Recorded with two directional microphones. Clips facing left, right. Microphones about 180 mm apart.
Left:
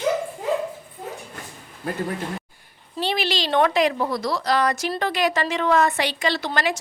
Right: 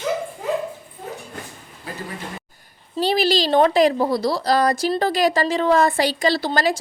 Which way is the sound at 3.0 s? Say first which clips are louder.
Right 6 dB; 35° right (ahead or behind).